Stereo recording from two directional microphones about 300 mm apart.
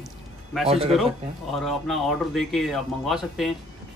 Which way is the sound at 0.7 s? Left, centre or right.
Centre.